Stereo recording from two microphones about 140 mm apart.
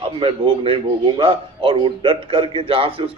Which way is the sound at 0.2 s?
40° right (ahead or behind).